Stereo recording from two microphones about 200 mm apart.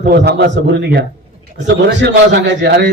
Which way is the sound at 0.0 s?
55° right (ahead or behind).